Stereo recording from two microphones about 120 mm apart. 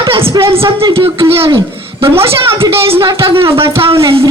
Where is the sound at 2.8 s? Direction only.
50° right (ahead or behind).